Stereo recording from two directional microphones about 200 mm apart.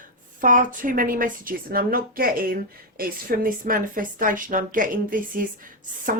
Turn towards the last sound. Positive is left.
turn(degrees=-40)  # may be behind; listen again after turning